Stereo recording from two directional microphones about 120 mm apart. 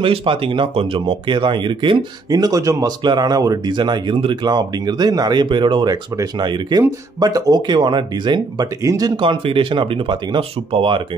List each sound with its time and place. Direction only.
0.0 s speech: 45° right (ahead or behind)
2.3 s speech: 30° right (ahead or behind)
9.2 s speech: 45° right (ahead or behind)